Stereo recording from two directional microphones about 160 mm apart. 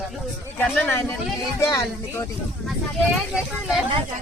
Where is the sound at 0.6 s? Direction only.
10° left (ahead or behind).